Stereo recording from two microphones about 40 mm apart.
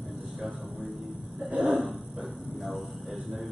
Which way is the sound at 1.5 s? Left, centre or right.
Right.